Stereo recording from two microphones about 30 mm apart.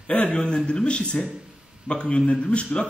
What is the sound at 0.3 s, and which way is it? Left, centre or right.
A man's voice, left.